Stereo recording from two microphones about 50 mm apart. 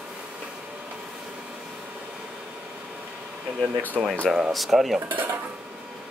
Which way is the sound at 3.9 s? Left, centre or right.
Centre.